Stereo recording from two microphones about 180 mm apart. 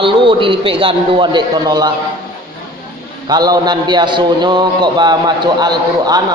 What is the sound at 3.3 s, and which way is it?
A man's voice, 20° right (ahead or behind).